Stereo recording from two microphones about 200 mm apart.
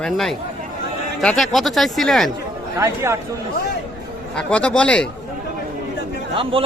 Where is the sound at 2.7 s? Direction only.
15° right (ahead or behind).